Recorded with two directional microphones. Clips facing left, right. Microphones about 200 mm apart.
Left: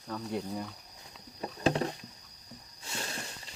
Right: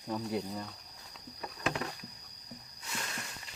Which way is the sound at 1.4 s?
30° left (ahead or behind).